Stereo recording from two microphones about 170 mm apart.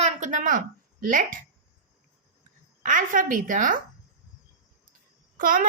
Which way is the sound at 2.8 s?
50° right (ahead or behind).